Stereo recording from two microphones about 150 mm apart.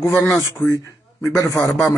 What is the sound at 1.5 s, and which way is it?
Speech, centre (ahead or behind).